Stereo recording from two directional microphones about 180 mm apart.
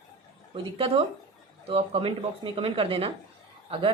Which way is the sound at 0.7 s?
30° right (ahead or behind).